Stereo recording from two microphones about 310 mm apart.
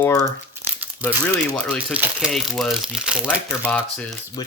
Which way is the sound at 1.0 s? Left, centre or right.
Centre.